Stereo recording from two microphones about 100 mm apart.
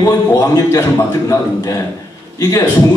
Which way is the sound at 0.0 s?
30° left (ahead or behind).